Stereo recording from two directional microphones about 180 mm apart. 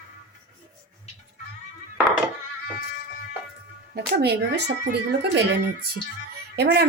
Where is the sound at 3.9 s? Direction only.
65° right (ahead or behind).